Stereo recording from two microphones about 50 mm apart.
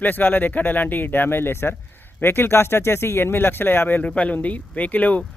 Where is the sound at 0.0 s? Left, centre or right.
Left.